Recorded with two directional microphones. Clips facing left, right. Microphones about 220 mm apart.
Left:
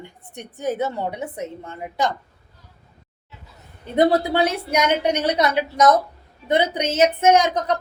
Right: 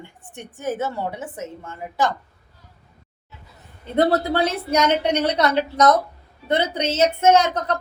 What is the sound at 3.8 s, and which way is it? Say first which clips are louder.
A woman's voice: left 1 dB; 15° left (ahead or behind).